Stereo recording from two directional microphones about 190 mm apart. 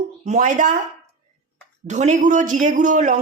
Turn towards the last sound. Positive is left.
turn(degrees=-40)  # may be behind; listen again after turning